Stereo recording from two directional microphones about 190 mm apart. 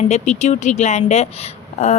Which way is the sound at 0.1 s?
35° left (ahead or behind).